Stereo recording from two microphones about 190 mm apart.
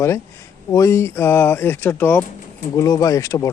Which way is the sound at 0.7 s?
15° left (ahead or behind).